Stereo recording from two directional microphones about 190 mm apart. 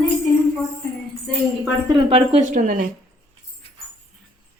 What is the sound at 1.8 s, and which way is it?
Speech, 25° right (ahead or behind).